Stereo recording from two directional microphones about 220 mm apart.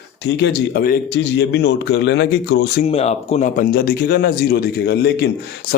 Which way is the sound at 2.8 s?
30° left (ahead or behind).